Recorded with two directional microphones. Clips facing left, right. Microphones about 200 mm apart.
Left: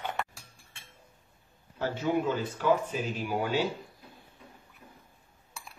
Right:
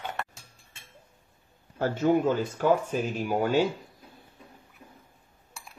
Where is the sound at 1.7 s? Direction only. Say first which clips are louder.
Right 5 dB; 45° right (ahead or behind).